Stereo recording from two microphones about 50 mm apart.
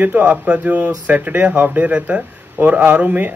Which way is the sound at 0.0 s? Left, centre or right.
Right.